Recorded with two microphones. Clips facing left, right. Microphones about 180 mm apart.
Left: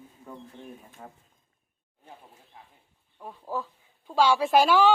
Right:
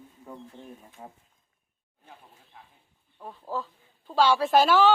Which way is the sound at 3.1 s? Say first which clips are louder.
Even; 5° left (ahead or behind).